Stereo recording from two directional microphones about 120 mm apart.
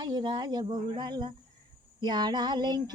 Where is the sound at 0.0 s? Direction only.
35° right (ahead or behind).